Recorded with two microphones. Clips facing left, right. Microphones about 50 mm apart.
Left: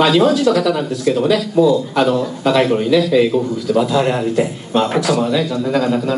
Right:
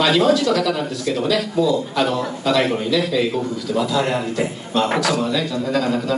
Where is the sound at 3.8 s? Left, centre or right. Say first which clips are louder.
Left 3 dB; left.